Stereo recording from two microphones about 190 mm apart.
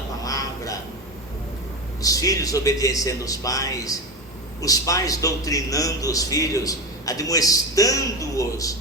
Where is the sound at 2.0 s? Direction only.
20° left (ahead or behind).